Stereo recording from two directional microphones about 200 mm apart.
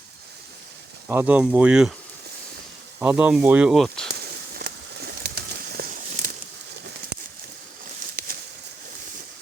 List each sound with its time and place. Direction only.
1.0 s speech: 10° right (ahead or behind)
3.0 s speech: 10° right (ahead or behind)
4.1 s a sound: 50° right (ahead or behind)